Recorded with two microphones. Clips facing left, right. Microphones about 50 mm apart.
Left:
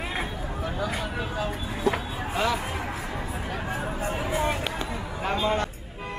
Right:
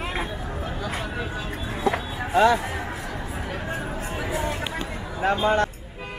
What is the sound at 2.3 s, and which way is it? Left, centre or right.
Speech, right.